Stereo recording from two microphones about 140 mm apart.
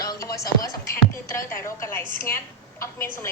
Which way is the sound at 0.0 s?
25° left (ahead or behind).